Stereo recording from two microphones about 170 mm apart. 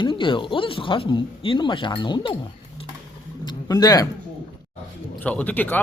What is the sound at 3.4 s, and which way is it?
Speech, 20° left (ahead or behind).